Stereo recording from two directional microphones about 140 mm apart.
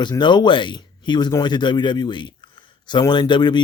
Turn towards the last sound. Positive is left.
turn(degrees=30)  # may be behind; listen again after turning